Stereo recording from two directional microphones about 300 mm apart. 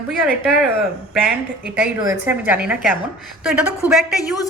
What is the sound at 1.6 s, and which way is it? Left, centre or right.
A woman's voice, centre.